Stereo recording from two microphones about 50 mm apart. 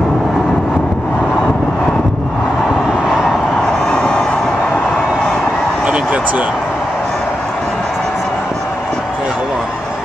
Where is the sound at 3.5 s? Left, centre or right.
Centre.